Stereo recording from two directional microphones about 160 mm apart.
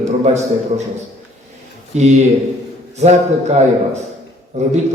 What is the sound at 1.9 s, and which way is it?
A man's voice, 45° right (ahead or behind).